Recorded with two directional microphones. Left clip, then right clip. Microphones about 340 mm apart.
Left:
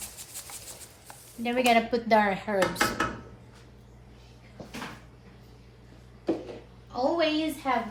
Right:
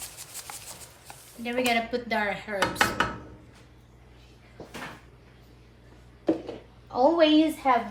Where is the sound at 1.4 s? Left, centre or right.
Centre.